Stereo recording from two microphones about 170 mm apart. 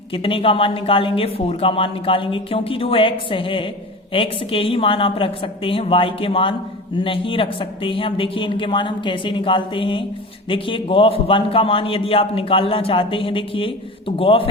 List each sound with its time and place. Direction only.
0.1 s speech: 30° left (ahead or behind)